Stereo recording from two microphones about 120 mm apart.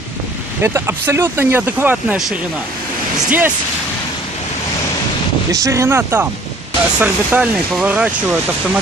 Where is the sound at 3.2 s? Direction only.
15° right (ahead or behind).